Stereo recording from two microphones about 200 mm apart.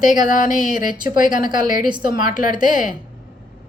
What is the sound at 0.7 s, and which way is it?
Speech, 45° left (ahead or behind).